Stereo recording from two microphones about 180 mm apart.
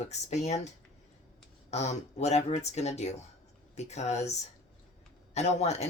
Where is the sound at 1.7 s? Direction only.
40° left (ahead or behind).